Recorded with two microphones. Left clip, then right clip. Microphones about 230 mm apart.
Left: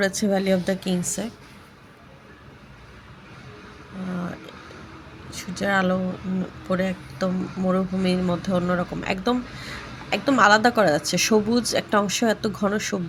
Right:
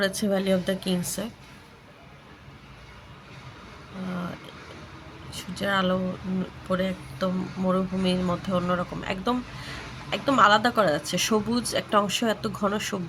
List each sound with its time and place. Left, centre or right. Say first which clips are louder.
0.0 s a woman's voice: left 3 dB; centre
5.3 s speech: left 3 dB; centre